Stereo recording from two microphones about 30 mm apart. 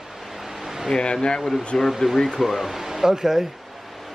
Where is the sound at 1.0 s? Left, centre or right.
Left.